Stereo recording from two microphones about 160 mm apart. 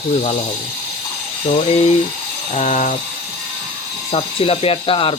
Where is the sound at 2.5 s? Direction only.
50° left (ahead or behind).